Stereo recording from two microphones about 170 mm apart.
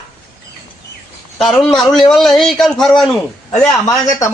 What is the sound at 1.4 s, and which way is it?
A man's voice, centre (ahead or behind).